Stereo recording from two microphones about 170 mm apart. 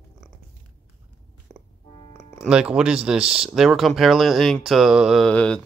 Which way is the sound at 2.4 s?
5° right (ahead or behind).